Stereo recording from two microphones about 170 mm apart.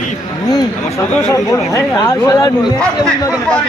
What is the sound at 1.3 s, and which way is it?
Speech, 20° left (ahead or behind).